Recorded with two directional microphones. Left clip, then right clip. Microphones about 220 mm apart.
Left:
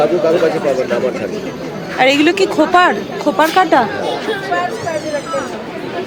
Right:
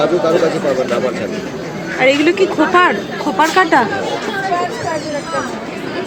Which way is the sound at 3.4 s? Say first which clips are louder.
Even; centre (ahead or behind).